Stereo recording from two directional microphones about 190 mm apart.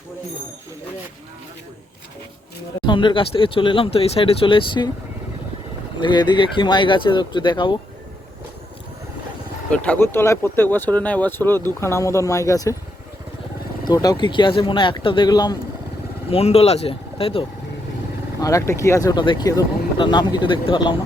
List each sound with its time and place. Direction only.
2.8 s speech: 25° left (ahead or behind)
6.0 s speech: 25° left (ahead or behind)
9.7 s speech: 5° left (ahead or behind)
13.8 s speech: 20° left (ahead or behind)
16.3 s speech: 30° left (ahead or behind)
18.3 s speech: 15° left (ahead or behind)